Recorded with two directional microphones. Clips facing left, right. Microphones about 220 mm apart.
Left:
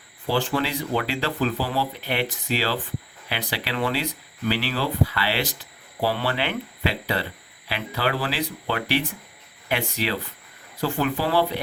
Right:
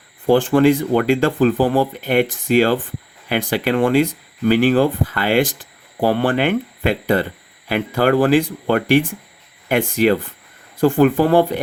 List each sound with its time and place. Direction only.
0.3 s speech: 50° right (ahead or behind)